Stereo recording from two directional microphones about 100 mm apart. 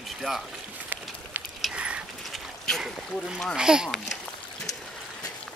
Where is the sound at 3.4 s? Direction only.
Centre (ahead or behind).